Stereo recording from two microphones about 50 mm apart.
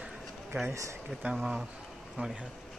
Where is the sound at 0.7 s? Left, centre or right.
Right.